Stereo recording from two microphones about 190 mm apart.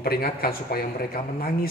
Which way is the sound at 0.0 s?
55° left (ahead or behind).